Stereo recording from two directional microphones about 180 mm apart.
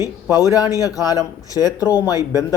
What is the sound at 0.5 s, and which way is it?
Speech, 20° left (ahead or behind).